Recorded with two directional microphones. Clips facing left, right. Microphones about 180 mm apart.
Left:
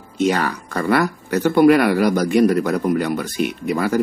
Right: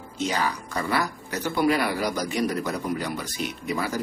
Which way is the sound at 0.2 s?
60° left (ahead or behind).